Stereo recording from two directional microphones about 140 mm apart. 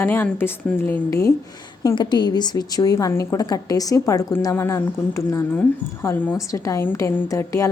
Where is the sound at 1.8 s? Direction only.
30° left (ahead or behind).